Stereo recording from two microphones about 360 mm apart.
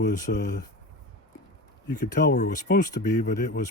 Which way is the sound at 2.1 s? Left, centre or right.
Left.